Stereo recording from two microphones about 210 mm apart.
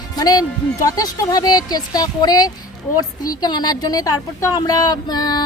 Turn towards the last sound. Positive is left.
turn(degrees=20)  # may be behind; listen again after turning